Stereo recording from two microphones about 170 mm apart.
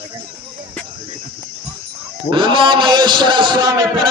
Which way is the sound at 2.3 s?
30° right (ahead or behind).